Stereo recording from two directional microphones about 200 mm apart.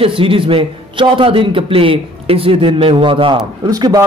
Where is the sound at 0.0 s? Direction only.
25° right (ahead or behind).